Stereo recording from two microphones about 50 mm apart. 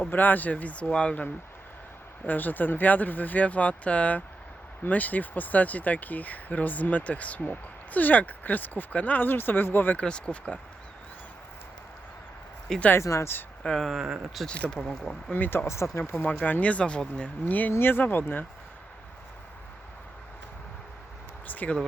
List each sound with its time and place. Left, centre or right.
0.0 s speech: left
2.2 s speech: left
10.0 s speech: left
13.0 s speech: left
13.6 s speech: centre
13.9 s speech: centre
14.4 s speech: centre
15.3 s speech: left
15.6 s speech: left
16.2 s speech: left
17.4 s speech: left
17.7 s speech: left
21.4 s a sound: left